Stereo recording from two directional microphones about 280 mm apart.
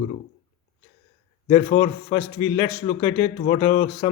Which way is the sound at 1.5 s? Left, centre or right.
Left.